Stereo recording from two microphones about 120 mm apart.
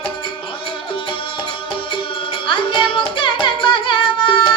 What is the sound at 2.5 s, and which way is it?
Music, 45° left (ahead or behind).